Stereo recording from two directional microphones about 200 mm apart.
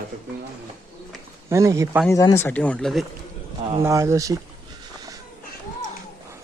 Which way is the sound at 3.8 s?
15° right (ahead or behind).